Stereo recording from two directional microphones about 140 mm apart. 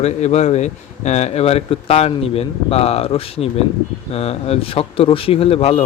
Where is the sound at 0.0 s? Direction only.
55° left (ahead or behind).